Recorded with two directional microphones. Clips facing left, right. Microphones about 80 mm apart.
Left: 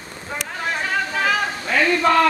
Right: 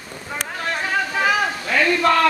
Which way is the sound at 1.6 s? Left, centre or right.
Centre.